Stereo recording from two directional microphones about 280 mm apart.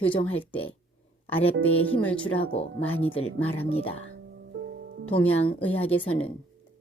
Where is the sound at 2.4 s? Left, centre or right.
Centre.